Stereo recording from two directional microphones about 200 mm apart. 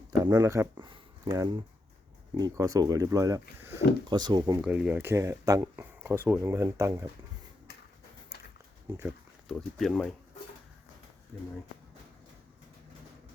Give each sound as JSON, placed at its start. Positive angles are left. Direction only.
{"t": 0.2, "sound": "speech", "side_deg": -15}
{"t": 4.6, "sound": "speech", "side_deg": -5}
{"t": 9.0, "sound": "pig", "side_deg": -5}
{"t": 9.6, "sound": "speech", "side_deg": 0}